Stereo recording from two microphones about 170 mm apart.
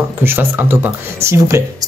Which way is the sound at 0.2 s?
15° right (ahead or behind).